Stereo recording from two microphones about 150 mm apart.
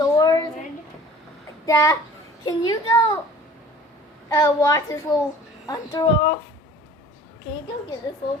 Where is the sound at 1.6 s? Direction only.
25° left (ahead or behind).